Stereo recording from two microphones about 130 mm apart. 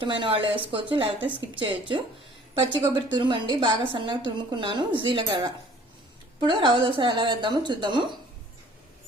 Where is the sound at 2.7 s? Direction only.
35° right (ahead or behind).